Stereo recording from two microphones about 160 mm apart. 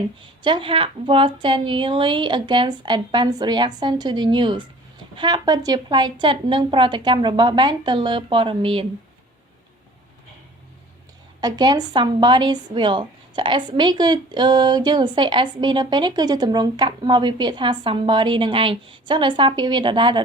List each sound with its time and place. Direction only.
0.4 s a woman's voice: 30° right (ahead or behind)
11.3 s a woman's voice: 25° right (ahead or behind)